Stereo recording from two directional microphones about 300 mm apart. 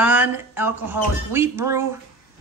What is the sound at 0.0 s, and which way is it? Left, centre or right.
Speech, centre.